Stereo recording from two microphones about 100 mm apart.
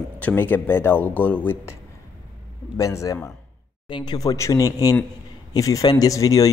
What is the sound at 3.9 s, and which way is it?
Speech, 45° left (ahead or behind).